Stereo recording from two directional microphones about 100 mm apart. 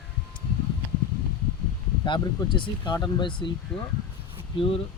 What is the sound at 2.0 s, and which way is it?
Speech, 50° left (ahead or behind).